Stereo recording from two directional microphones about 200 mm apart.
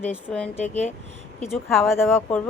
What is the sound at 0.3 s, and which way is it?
Speech, 5° left (ahead or behind).